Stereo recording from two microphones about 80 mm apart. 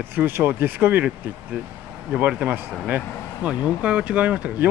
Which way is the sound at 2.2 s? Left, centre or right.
Right.